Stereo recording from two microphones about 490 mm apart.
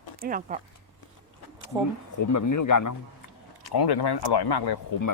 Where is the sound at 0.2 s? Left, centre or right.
Centre.